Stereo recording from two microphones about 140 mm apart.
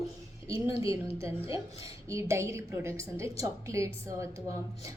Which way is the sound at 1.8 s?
25° right (ahead or behind).